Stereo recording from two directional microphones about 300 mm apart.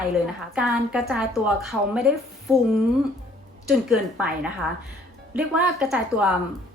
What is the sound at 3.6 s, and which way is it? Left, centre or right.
A woman's voice, centre.